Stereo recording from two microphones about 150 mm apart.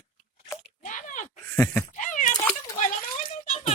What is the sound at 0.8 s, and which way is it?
Biting, 60° left (ahead or behind).